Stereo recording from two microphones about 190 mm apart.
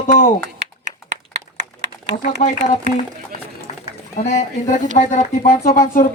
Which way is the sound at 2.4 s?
40° left (ahead or behind).